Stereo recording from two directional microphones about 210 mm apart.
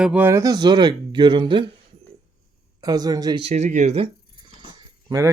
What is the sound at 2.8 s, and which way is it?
Speech, 20° right (ahead or behind).